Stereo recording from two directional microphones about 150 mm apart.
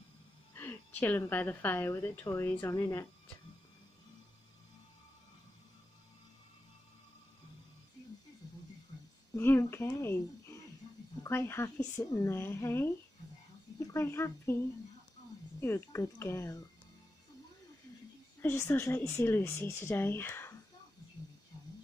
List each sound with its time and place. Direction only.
0.6 s a woman's voice: 10° left (ahead or behind)
9.3 s a woman's voice: 20° left (ahead or behind)
15.6 s a woman's voice: 15° left (ahead or behind)
18.4 s a woman's voice: 15° left (ahead or behind)